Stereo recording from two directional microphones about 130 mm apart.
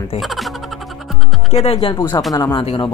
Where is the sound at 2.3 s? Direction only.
30° left (ahead or behind).